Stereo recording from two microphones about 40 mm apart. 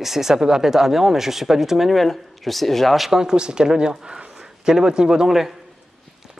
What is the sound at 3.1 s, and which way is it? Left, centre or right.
Speech, centre.